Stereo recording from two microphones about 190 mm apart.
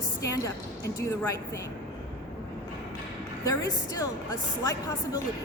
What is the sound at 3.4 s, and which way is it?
A woman's voice, 20° left (ahead or behind).